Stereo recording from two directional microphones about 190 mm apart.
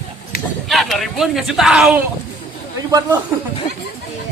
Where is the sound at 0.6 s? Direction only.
Centre (ahead or behind).